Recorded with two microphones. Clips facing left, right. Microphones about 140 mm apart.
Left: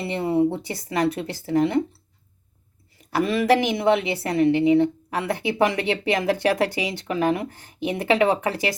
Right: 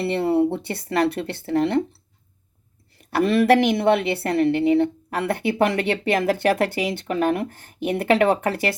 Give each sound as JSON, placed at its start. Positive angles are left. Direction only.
{"t": 0.0, "sound": "a woman's voice", "side_deg": -65}
{"t": 3.0, "sound": "a woman's voice", "side_deg": -60}